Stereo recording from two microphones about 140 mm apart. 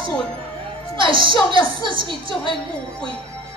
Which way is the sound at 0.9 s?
35° right (ahead or behind).